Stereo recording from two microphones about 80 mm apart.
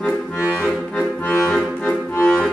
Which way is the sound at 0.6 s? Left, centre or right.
Centre.